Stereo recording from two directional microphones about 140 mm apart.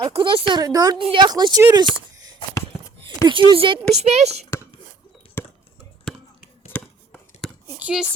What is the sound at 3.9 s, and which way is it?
Speech, 50° right (ahead or behind).